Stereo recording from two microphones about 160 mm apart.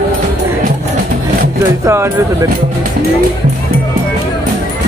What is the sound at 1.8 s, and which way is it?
Speech, 20° right (ahead or behind).